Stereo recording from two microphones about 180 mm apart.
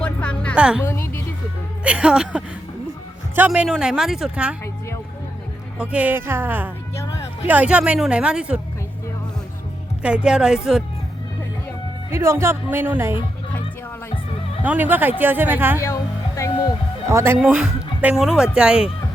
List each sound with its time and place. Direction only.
0.0 s music: 5° left (ahead or behind)
0.5 s speech: 5° right (ahead or behind)
0.9 s music: 15° left (ahead or behind)
1.8 s speech: 5° right (ahead or behind)
5.8 s speech: 10° right (ahead or behind)
10.0 s speech: 5° right (ahead or behind)
12.1 s speech: 15° right (ahead or behind)
14.6 s speech: 10° right (ahead or behind)
15.8 s music: 15° left (ahead or behind)
17.1 s speech: 15° right (ahead or behind)